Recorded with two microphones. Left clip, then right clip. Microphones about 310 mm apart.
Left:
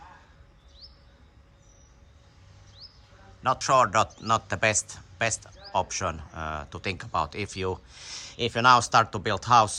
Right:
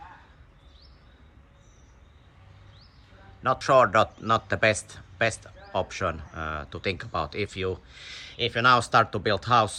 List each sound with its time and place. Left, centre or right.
3.4 s speech: centre